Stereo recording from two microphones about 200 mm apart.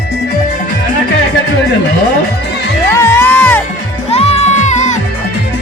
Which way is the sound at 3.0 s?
10° left (ahead or behind).